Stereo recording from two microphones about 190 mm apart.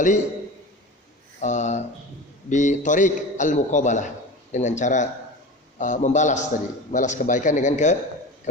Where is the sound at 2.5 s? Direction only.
40° left (ahead or behind).